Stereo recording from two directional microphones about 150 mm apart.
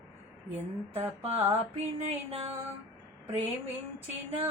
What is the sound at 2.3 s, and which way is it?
Music, 40° right (ahead or behind).